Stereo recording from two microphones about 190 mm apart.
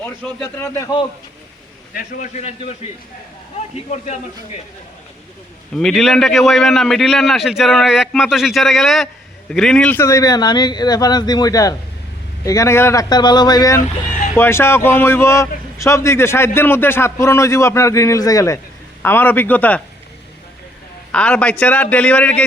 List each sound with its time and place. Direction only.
0.0 s a man's voice: 10° left (ahead or behind)
1.9 s a man's voice: 45° left (ahead or behind)
4.0 s a man's voice: 40° left (ahead or behind)
5.7 s a man's voice: centre (ahead or behind)
21.1 s a man's voice: 5° left (ahead or behind)